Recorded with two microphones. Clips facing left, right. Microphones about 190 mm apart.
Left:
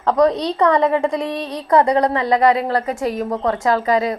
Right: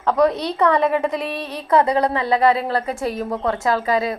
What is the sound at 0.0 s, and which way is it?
A woman's voice, 20° left (ahead or behind).